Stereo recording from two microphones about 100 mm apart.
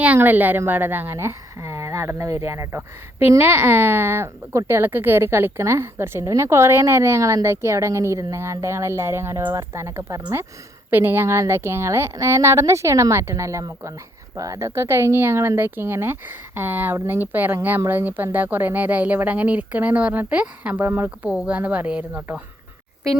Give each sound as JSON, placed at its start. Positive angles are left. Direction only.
{"t": 0.0, "sound": "a woman's voice", "side_deg": -15}